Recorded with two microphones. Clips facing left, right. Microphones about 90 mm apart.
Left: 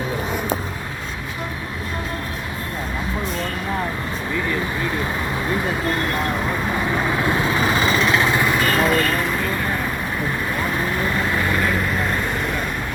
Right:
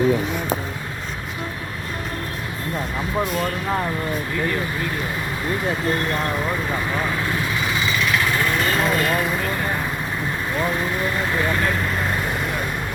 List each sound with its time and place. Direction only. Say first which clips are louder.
7.3 s vehicle: left 4 dB; 30° left (ahead or behind)
7.7 s lawn mower: left 2 dB; 40° left (ahead or behind); by 8.5 s 20° left (ahead or behind)
8.7 s vehicle: left 2 dB; centre (ahead or behind)